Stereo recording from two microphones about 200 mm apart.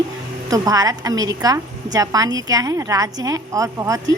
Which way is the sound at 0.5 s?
15° right (ahead or behind).